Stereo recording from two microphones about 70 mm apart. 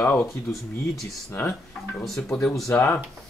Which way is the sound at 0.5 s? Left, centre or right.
Centre.